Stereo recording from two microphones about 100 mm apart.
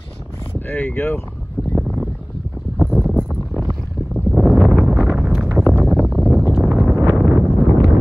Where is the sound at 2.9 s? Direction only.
5° right (ahead or behind).